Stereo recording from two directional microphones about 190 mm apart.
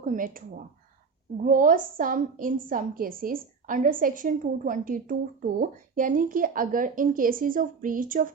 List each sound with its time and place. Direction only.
0.0 s a woman's voice: 45° right (ahead or behind)